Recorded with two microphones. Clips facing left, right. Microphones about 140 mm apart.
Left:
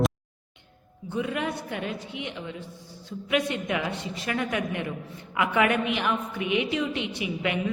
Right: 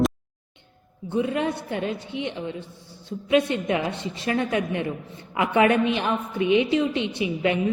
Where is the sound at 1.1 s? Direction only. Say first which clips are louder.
Right 5 dB; 25° right (ahead or behind).